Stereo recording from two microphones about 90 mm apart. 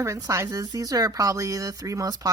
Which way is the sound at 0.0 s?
35° right (ahead or behind).